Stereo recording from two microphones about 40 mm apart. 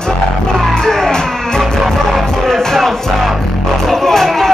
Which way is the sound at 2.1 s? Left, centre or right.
Centre.